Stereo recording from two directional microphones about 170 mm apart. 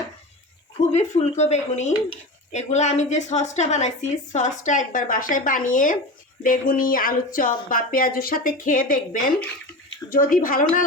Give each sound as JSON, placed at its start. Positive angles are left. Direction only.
{"t": 0.8, "sound": "speech", "side_deg": 40}